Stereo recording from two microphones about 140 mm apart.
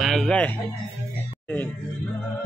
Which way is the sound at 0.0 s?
Centre (ahead or behind).